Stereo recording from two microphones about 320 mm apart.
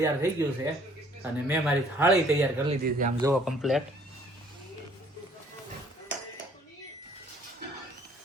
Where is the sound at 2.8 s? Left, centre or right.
Right.